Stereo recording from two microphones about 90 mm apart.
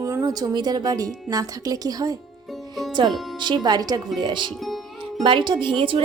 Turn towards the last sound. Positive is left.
turn(degrees=-65)  # may be behind; listen again after turning